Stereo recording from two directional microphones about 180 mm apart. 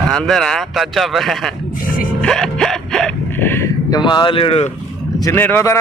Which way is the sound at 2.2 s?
5° left (ahead or behind).